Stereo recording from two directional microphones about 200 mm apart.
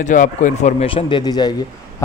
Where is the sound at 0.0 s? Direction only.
40° left (ahead or behind).